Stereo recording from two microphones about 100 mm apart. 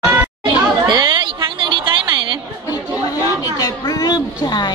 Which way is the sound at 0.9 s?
45° right (ahead or behind).